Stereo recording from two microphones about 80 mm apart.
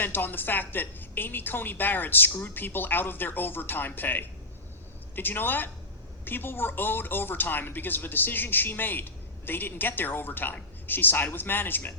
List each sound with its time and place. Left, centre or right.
0.0 s speech: left